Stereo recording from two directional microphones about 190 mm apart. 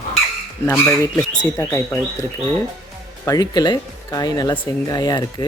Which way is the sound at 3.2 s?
20° left (ahead or behind).